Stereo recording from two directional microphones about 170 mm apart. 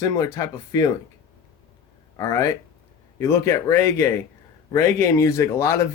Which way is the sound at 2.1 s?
20° left (ahead or behind).